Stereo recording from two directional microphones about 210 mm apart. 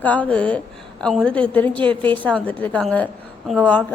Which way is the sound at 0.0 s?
5° left (ahead or behind).